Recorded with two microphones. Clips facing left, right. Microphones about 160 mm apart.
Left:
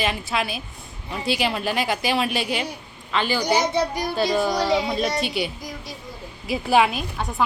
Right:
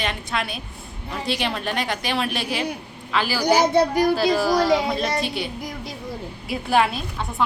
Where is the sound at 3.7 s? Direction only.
55° right (ahead or behind).